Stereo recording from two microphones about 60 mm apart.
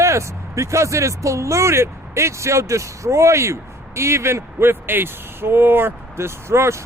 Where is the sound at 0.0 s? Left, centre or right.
Right.